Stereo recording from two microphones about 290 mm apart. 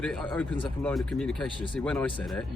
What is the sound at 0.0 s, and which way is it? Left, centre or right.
Speech, centre.